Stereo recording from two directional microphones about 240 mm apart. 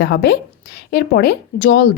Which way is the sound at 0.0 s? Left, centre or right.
Left.